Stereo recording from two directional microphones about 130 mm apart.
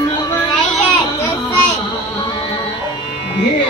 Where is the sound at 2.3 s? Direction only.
40° left (ahead or behind).